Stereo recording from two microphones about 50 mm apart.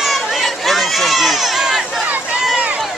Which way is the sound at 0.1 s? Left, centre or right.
Centre.